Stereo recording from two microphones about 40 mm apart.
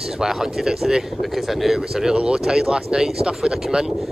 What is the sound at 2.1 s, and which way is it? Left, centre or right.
Speech, right.